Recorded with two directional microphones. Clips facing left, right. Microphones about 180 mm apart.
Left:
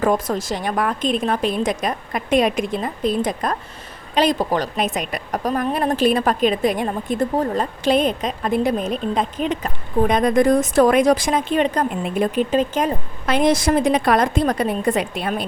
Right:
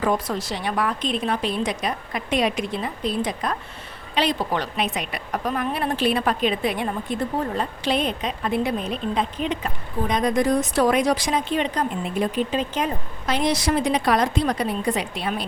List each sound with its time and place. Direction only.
0.0 s a woman's voice: 45° left (ahead or behind)
10.0 s a woman's voice: 55° left (ahead or behind)